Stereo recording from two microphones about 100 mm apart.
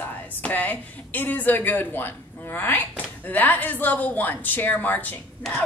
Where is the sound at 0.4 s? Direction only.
20° left (ahead or behind).